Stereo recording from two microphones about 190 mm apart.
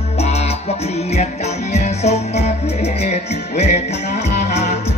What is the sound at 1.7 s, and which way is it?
Music, 35° left (ahead or behind).